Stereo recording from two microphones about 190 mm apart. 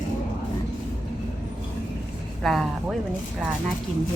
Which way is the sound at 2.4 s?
Centre (ahead or behind).